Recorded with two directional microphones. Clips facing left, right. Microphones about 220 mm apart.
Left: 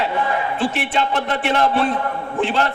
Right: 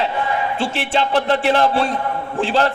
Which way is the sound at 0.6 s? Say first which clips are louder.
Even; 30° right (ahead or behind).